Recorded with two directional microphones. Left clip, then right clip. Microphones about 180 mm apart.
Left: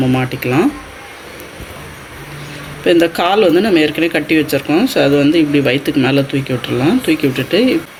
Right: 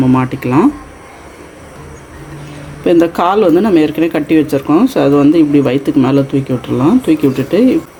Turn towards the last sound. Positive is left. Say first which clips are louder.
# right 2 dB
turn(degrees=-45)  # may be behind; listen again after turning